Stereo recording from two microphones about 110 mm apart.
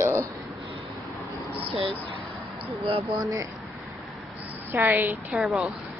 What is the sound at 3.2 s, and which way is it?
Speech, 30° right (ahead or behind).